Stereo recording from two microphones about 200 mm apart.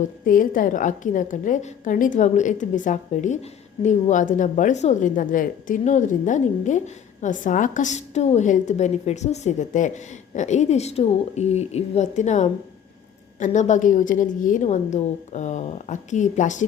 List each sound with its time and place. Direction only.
0.0 s a woman's voice: 45° left (ahead or behind)